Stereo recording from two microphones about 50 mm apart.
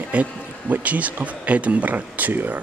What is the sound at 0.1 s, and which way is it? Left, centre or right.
Speech, right.